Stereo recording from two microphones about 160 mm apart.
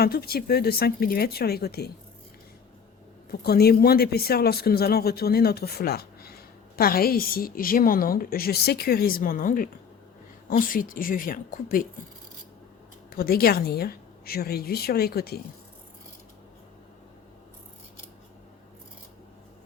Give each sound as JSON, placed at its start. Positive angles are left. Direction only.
{"t": 0.0, "sound": "a man's voice", "side_deg": 75}
{"t": 3.2, "sound": "a man's voice", "side_deg": 75}
{"t": 13.1, "sound": "a man's voice", "side_deg": 70}